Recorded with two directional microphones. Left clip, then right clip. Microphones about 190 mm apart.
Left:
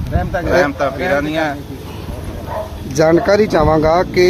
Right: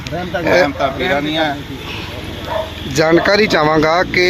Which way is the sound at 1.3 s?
40° left (ahead or behind).